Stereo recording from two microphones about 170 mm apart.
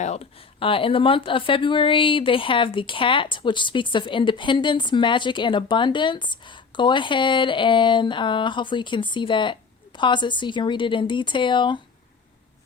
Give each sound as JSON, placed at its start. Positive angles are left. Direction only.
{"t": 0.0, "sound": "speech", "side_deg": 40}